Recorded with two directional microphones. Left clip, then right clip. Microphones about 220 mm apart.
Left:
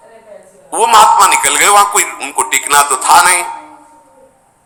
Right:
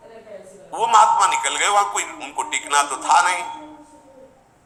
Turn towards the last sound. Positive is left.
turn(degrees=55)  # may be behind; listen again after turning